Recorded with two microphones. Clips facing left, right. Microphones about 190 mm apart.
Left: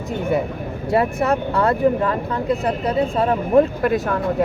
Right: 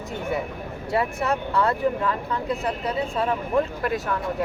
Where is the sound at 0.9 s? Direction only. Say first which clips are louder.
Left 6 dB; 50° left (ahead or behind).